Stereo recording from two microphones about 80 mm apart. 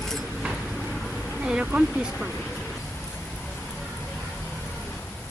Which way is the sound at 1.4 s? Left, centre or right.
Centre.